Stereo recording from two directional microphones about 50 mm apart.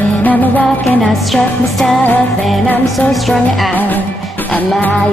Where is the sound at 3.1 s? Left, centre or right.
Centre.